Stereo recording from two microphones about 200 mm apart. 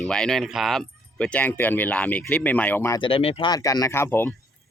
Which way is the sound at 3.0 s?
25° left (ahead or behind).